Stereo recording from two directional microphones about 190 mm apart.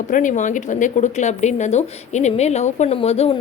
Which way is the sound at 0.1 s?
45° left (ahead or behind).